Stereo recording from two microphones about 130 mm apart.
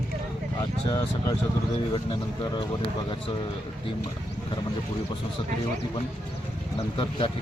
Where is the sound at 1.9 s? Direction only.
35° left (ahead or behind).